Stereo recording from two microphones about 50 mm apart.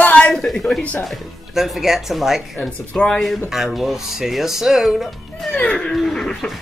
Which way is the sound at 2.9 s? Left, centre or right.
Left.